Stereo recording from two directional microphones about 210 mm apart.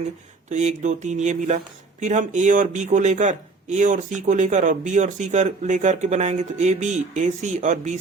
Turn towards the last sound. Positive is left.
turn(degrees=-35)  # may be behind; listen again after turning